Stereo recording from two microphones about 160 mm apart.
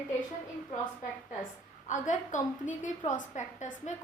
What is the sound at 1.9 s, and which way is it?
A woman's voice, 50° left (ahead or behind).